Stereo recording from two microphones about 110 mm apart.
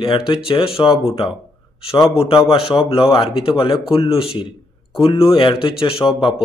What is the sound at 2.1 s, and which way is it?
A man's voice, 60° left (ahead or behind).